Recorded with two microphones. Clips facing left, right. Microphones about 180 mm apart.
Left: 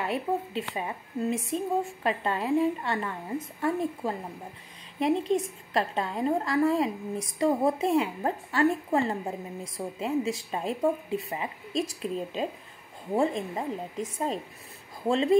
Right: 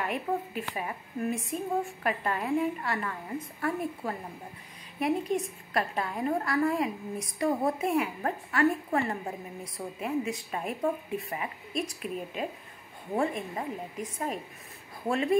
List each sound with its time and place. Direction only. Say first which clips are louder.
0.0 s a woman's voice: left 2 dB; 25° left (ahead or behind)